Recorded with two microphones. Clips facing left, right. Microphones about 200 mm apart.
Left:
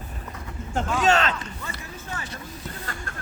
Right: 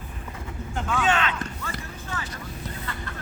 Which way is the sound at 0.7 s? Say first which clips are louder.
Left 3 dB; 40° left (ahead or behind).